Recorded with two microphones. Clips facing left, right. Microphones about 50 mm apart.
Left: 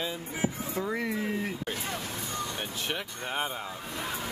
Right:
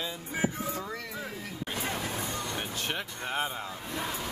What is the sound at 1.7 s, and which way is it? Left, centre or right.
Hubbub, centre.